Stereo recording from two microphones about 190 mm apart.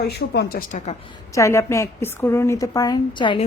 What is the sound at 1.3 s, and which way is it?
A woman's voice, 15° left (ahead or behind).